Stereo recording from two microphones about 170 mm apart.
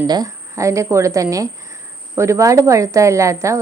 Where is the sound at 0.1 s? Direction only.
20° right (ahead or behind).